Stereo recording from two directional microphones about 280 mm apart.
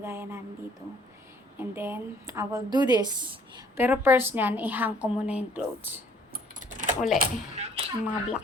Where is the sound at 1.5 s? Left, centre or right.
Centre.